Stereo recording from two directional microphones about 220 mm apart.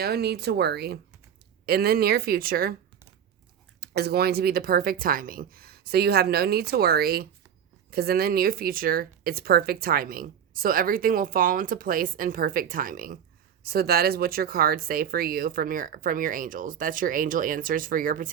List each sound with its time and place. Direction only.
0.0 s speech: 45° right (ahead or behind)
3.8 s speech: 45° right (ahead or behind)